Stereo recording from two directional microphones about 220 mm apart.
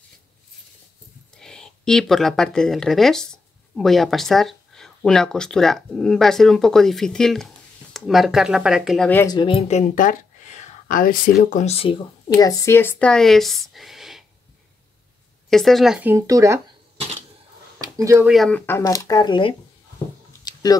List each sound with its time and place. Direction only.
1.3 s speech: 5° left (ahead or behind)
15.5 s speech: centre (ahead or behind)
17.7 s speech: 15° right (ahead or behind); by 19.5 s 20° left (ahead or behind)
20.4 s a sound: 15° left (ahead or behind)